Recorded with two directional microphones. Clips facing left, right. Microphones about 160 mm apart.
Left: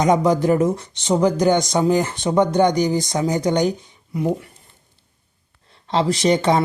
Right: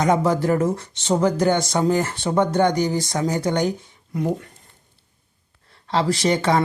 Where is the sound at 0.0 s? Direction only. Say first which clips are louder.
Left 2 dB; 15° left (ahead or behind).